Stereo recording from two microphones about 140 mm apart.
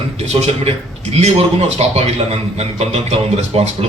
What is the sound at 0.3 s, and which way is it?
A man's voice, 50° right (ahead or behind).